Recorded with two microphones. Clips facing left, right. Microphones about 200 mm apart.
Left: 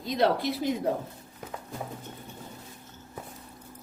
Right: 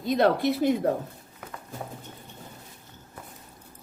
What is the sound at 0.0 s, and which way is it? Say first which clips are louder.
Speech: right 3 dB; 55° right (ahead or behind).